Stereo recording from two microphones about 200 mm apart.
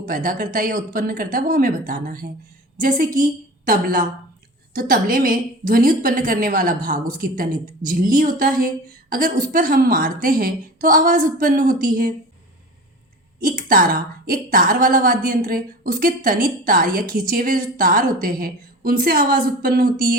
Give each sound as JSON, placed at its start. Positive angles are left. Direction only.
{"t": 0.1, "sound": "a woman's voice", "side_deg": -45}
{"t": 13.4, "sound": "a woman's voice", "side_deg": -45}